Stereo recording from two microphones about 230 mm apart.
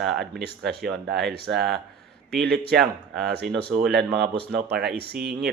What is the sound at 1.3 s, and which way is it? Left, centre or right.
Speech, right.